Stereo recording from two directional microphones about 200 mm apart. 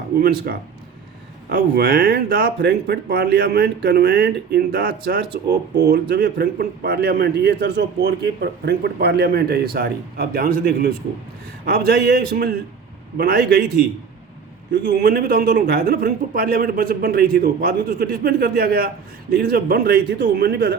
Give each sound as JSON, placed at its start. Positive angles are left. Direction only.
{"t": 0.2, "sound": "speech", "side_deg": -50}
{"t": 14.7, "sound": "speech", "side_deg": -50}